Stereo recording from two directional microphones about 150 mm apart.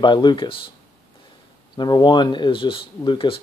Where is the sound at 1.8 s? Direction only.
30° left (ahead or behind).